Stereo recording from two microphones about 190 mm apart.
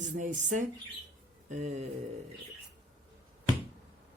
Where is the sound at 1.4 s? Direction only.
40° right (ahead or behind).